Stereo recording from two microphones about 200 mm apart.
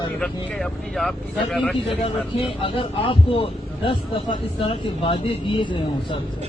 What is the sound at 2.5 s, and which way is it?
Speech, 25° left (ahead or behind).